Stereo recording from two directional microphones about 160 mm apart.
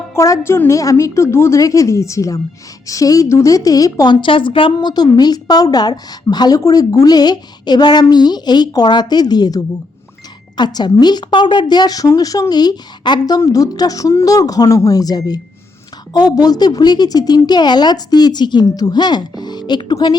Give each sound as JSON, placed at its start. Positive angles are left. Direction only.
{"t": 0.1, "sound": "a woman's voice", "side_deg": 20}